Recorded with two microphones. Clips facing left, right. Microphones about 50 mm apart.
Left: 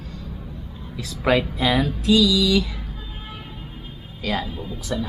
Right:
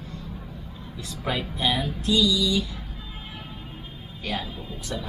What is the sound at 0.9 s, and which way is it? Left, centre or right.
Speech, left.